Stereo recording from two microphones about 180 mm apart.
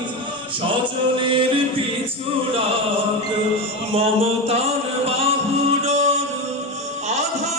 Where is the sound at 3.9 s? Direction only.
35° right (ahead or behind).